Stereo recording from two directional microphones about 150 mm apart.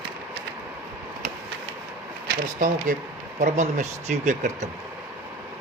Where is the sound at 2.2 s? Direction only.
65° right (ahead or behind).